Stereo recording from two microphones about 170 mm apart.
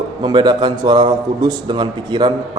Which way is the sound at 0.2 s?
25° right (ahead or behind).